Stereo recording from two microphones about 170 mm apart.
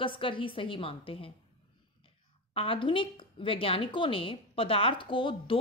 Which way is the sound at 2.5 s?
30° left (ahead or behind).